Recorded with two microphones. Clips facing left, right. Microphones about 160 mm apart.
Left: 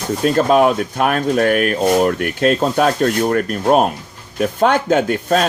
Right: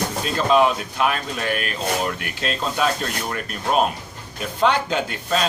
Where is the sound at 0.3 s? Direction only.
50° left (ahead or behind).